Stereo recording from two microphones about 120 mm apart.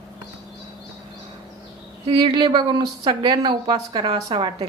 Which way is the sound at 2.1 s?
45° right (ahead or behind).